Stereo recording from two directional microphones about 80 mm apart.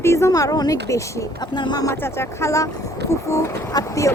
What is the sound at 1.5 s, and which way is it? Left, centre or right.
Speech, left.